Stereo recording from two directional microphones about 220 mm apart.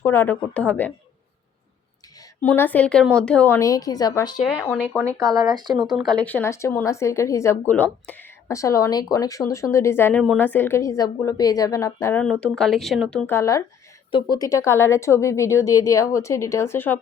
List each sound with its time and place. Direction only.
0.0 s a woman's voice: 10° left (ahead or behind)
2.4 s a woman's voice: 10° left (ahead or behind)
4.4 s speech: centre (ahead or behind)
4.9 s speech: 15° right (ahead or behind)
5.7 s a woman's voice: centre (ahead or behind)